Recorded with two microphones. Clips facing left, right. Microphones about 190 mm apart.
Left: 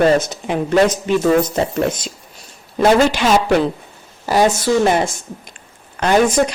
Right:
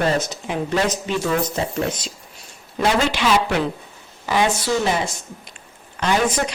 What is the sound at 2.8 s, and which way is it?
Speech, 45° left (ahead or behind).